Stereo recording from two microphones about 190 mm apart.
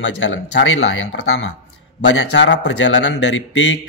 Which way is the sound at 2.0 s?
70° left (ahead or behind).